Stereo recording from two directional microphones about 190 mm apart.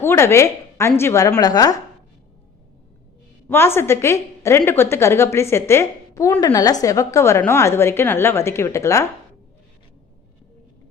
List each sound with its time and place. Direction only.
0.0 s a woman's voice: 15° left (ahead or behind)
3.5 s a woman's voice: 10° left (ahead or behind)